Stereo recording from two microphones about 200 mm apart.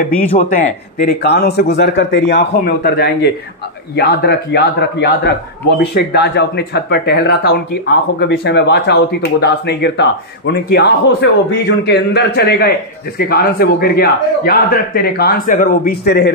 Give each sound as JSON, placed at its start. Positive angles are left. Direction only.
{"t": 0.3, "sound": "a man's voice", "side_deg": 40}